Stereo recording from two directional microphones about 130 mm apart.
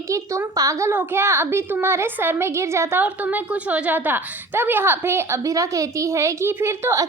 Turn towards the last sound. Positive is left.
turn(degrees=-20)  # may be behind; listen again after turning